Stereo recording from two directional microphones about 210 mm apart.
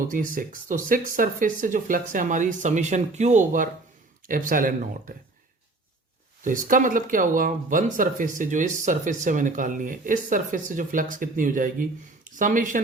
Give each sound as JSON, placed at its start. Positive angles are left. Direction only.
{"t": 0.1, "sound": "speech", "side_deg": -40}
{"t": 6.4, "sound": "speech", "side_deg": -40}